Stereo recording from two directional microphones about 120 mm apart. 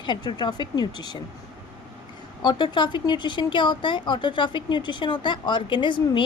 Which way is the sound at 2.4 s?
40° left (ahead or behind).